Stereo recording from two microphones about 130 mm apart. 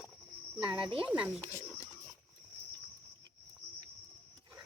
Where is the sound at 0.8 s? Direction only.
40° right (ahead or behind).